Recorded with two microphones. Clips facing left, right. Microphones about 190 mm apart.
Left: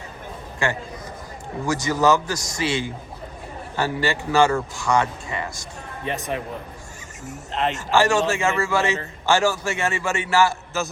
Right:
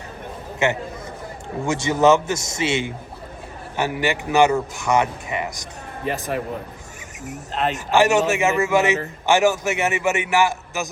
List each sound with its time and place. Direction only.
0.6 s a man's voice: 20° right (ahead or behind)
6.1 s speech: 5° right (ahead or behind)
7.5 s speech: centre (ahead or behind)
7.9 s a man's voice: 20° right (ahead or behind)